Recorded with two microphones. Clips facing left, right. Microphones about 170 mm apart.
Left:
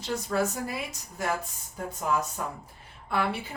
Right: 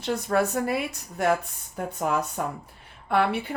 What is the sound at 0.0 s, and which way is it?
Speech, 60° right (ahead or behind).